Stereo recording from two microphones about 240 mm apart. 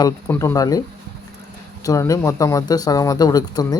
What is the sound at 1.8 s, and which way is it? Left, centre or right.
Speech, centre.